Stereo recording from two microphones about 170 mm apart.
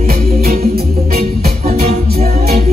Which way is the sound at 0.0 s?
60° right (ahead or behind).